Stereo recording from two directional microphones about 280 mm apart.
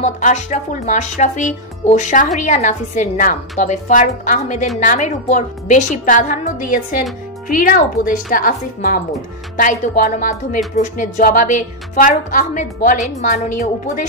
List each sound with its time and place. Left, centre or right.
0.0 s speech: left